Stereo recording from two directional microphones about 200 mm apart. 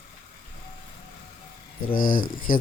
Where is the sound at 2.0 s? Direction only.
45° left (ahead or behind).